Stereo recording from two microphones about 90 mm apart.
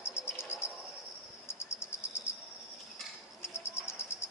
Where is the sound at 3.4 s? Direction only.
30° left (ahead or behind).